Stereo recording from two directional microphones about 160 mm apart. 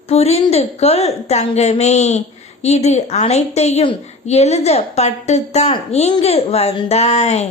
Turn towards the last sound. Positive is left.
turn(degrees=45)  # may be behind; listen again after turning